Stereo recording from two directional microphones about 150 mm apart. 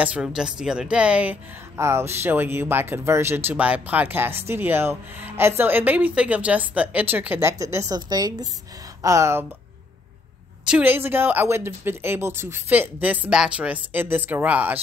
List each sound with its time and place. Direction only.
0.0 s a woman's voice: 5° right (ahead or behind)
10.7 s a woman's voice: 15° right (ahead or behind)